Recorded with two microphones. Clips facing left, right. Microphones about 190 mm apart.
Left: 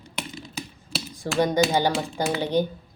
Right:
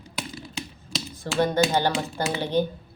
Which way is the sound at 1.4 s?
15° left (ahead or behind).